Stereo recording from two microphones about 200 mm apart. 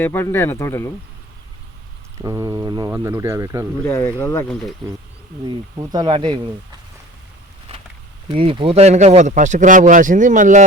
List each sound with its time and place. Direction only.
0.0 s speech: 10° left (ahead or behind)
2.1 s speech: 15° right (ahead or behind)
3.8 s speech: 15° left (ahead or behind)
5.5 s speech: 20° right (ahead or behind)
8.3 s speech: 25° right (ahead or behind)